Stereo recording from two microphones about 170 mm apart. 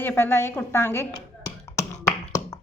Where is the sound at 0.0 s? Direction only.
10° left (ahead or behind).